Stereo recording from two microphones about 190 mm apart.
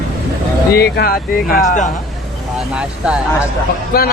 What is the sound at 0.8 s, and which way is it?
Speech, 55° left (ahead or behind).